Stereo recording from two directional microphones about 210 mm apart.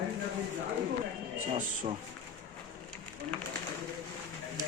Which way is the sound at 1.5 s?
30° right (ahead or behind).